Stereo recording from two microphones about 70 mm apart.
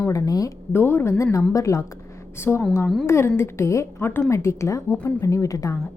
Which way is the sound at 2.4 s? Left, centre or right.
Left.